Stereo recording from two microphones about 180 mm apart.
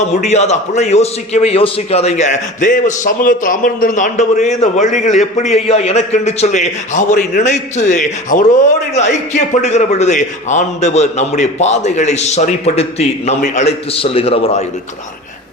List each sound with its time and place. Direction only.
0.2 s a man's voice: 40° left (ahead or behind)